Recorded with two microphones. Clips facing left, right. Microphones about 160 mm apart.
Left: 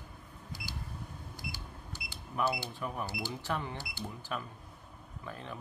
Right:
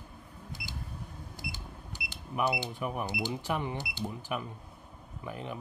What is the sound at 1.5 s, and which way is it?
A man's voice, 15° right (ahead or behind).